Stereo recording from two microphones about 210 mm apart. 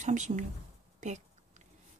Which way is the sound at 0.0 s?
35° right (ahead or behind).